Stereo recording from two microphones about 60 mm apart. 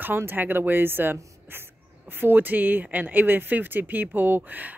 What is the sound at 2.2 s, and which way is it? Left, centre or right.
Speech, right.